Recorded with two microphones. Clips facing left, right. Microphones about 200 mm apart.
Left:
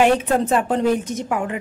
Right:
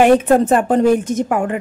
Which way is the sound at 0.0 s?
50° right (ahead or behind).